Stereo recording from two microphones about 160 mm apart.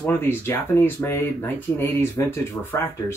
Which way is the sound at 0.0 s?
15° left (ahead or behind).